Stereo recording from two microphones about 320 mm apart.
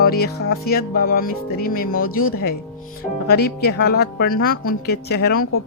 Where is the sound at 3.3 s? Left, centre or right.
Left.